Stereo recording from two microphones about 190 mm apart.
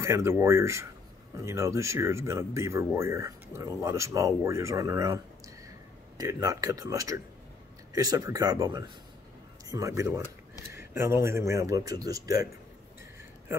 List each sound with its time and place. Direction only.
0.0 s speech: 15° right (ahead or behind)